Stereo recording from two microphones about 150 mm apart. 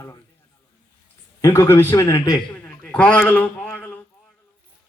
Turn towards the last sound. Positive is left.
turn(degrees=10)  # may be behind; listen again after turning